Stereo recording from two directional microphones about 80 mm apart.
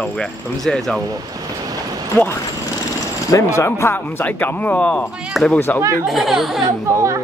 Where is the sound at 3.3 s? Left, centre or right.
Left; by 5.0 s centre.